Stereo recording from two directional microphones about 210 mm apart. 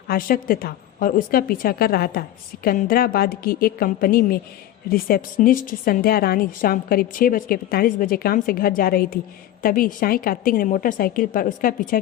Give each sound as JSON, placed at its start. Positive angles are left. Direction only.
{"t": 0.1, "sound": "a woman's voice", "side_deg": 45}